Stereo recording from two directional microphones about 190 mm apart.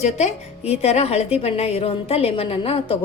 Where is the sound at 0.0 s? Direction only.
35° left (ahead or behind).